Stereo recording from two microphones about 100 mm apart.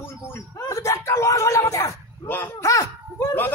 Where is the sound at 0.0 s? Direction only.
25° left (ahead or behind).